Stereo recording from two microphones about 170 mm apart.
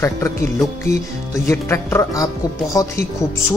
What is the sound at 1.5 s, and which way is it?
Speech, 15° left (ahead or behind).